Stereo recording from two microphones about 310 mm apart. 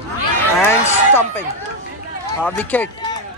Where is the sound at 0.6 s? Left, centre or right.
Centre.